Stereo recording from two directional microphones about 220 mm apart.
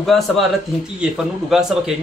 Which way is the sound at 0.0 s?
Centre (ahead or behind).